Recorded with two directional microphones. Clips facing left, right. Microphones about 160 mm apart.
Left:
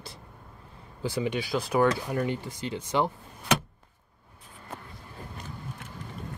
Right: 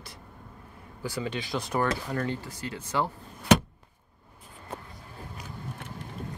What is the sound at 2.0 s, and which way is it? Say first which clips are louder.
Speech: left 2 dB; 15° left (ahead or behind).